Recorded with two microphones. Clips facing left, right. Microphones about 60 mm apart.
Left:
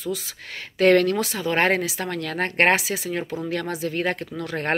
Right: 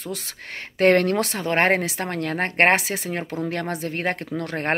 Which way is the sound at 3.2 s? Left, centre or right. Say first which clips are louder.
Even; right.